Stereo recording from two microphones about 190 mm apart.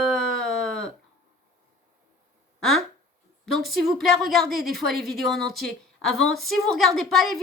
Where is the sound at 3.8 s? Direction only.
Centre (ahead or behind).